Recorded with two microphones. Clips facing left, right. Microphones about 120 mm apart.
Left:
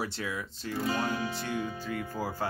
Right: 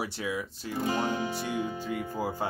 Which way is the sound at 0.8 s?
25° right (ahead or behind).